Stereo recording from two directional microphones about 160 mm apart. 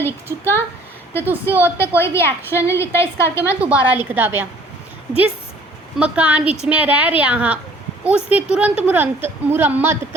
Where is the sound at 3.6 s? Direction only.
10° right (ahead or behind).